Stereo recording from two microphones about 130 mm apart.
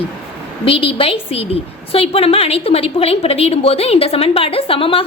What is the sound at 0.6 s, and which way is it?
A woman's voice, 45° left (ahead or behind).